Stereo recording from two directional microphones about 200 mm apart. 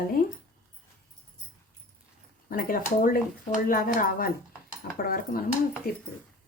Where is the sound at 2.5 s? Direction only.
45° left (ahead or behind).